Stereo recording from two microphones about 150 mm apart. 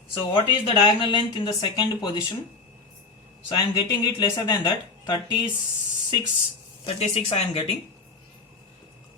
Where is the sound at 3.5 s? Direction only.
30° left (ahead or behind).